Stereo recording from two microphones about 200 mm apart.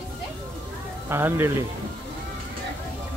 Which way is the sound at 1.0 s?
10° right (ahead or behind).